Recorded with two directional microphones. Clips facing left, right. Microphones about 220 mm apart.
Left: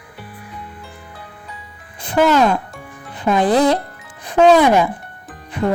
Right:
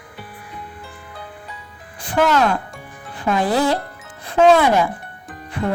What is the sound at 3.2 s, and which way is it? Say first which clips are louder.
Speech: left 4 dB; 20° left (ahead or behind).